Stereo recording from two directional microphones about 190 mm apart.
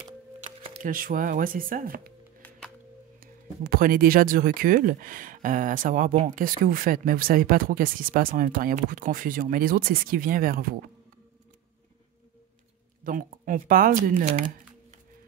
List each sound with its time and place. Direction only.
0.8 s speech: 45° right (ahead or behind)
3.2 s speech: 50° right (ahead or behind)
13.0 s speech: 45° right (ahead or behind)